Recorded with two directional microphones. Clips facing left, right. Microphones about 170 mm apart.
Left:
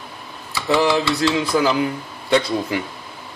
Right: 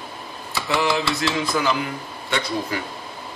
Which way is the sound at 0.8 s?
35° left (ahead or behind).